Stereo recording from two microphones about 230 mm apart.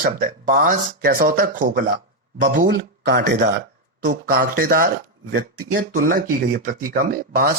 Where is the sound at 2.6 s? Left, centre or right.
Right.